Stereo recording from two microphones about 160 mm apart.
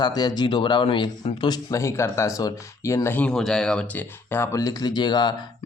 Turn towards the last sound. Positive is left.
turn(degrees=25)  # may be behind; listen again after turning